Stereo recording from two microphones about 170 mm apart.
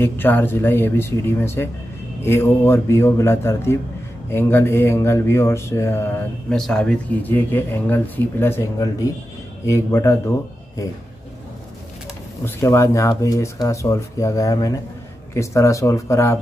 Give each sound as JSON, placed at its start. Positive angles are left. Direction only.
{"t": 0.0, "sound": "speech", "side_deg": 10}
{"t": 6.5, "sound": "speech", "side_deg": 5}
{"t": 12.4, "sound": "speech", "side_deg": 15}